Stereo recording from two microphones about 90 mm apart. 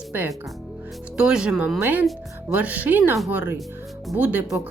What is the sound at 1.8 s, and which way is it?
A woman's voice, 20° right (ahead or behind).